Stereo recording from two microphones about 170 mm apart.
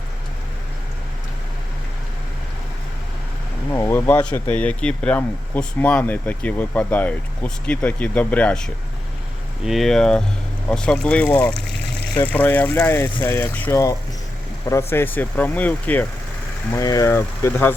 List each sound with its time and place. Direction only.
3.7 s speech: 20° left (ahead or behind)